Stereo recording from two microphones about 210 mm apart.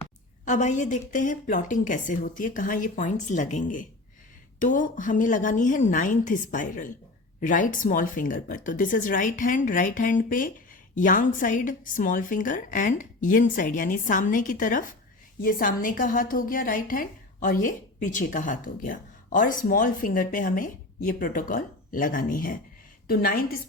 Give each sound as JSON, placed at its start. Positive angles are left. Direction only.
{"t": 0.4, "sound": "a woman's voice", "side_deg": 35}